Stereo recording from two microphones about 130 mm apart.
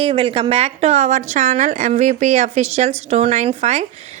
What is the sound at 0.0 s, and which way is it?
Speech, 45° right (ahead or behind).